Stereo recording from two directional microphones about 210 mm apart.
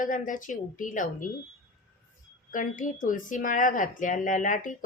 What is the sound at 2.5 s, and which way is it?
A woman's voice, 40° left (ahead or behind).